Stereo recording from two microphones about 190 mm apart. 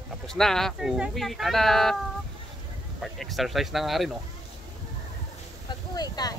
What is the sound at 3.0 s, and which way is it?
Speech, centre (ahead or behind).